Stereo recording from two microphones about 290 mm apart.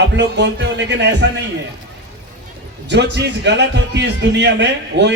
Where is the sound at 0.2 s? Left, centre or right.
Right.